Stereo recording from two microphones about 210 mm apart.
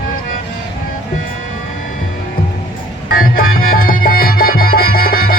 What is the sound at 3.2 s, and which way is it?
Music, 45° left (ahead or behind).